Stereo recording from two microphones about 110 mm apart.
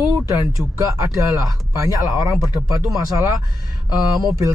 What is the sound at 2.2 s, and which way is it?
Speech, 30° right (ahead or behind).